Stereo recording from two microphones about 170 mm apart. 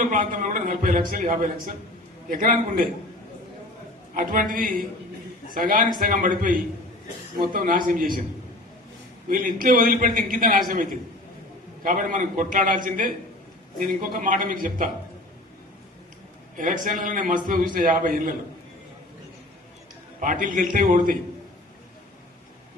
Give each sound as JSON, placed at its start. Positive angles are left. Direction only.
{"t": 0.1, "sound": "a man's voice", "side_deg": -50}
{"t": 4.1, "sound": "a man's voice", "side_deg": -55}
{"t": 9.3, "sound": "a man's voice", "side_deg": -55}
{"t": 16.6, "sound": "a man's voice", "side_deg": -50}
{"t": 20.1, "sound": "a man's voice", "side_deg": -50}